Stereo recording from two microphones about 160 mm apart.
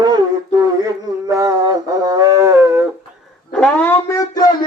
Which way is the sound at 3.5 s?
5° left (ahead or behind).